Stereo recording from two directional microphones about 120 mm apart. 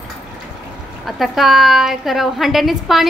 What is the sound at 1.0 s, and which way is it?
A woman's voice, centre (ahead or behind).